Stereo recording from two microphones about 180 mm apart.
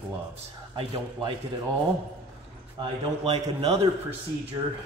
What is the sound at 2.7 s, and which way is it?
Speech, 35° right (ahead or behind).